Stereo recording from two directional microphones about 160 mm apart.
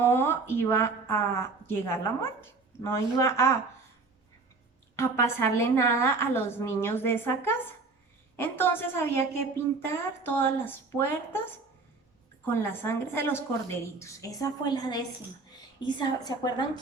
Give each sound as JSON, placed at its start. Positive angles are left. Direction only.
{"t": 0.0, "sound": "a woman's voice", "side_deg": 15}
{"t": 4.9, "sound": "a woman's voice", "side_deg": 15}